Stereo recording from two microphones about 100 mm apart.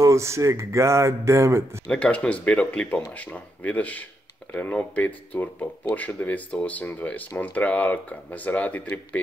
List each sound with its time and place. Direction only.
0.0 s speech: 30° right (ahead or behind)
1.9 s speech: 15° left (ahead or behind)